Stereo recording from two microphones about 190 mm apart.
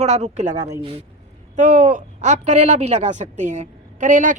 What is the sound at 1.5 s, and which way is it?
Speech, 40° right (ahead or behind).